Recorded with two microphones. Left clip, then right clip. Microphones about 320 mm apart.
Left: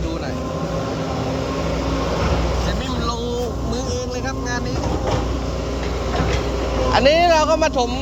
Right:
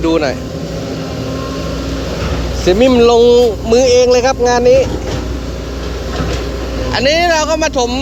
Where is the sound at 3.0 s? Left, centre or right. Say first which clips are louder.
Right 16 dB; centre.